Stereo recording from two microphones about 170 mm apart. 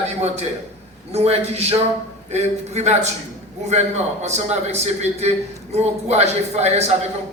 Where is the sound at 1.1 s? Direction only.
40° right (ahead or behind).